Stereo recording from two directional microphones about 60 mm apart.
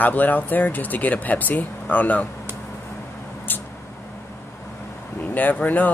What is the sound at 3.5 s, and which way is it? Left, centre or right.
Vehicle, left.